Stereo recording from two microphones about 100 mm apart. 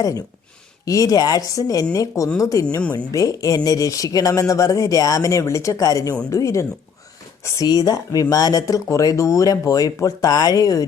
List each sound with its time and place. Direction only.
0.9 s speech: 35° left (ahead or behind)